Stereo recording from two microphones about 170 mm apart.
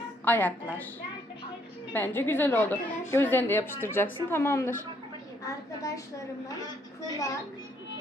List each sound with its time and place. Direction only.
0.3 s a woman's voice: 10° left (ahead or behind)
1.9 s a woman's voice: 10° left (ahead or behind)
5.4 s a sound: 20° left (ahead or behind)
6.5 s a woman's voice: 20° left (ahead or behind)